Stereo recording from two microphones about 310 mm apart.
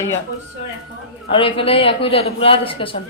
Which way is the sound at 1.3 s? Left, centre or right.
Centre.